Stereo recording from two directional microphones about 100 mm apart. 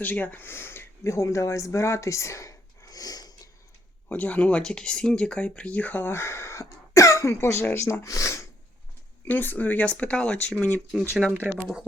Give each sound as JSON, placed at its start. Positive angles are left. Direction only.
{"t": 0.0, "sound": "speech", "side_deg": 15}
{"t": 4.1, "sound": "speech", "side_deg": 15}
{"t": 9.2, "sound": "speech", "side_deg": 20}
{"t": 11.5, "sound": "speech", "side_deg": -10}